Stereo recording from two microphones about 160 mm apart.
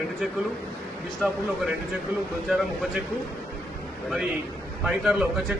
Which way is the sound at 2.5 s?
Centre (ahead or behind).